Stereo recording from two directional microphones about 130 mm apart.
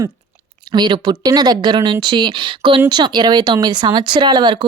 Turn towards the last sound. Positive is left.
turn(degrees=-35)  # may be behind; listen again after turning